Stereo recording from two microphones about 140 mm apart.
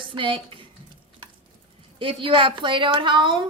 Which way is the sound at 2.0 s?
40° right (ahead or behind).